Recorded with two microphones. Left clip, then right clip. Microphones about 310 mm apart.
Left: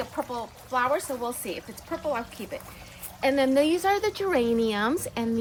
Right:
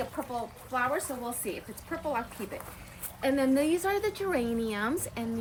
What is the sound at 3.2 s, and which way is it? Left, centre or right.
Speech, centre.